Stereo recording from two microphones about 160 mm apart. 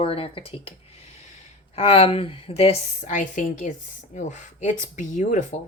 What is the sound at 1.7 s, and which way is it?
Speech, 40° left (ahead or behind).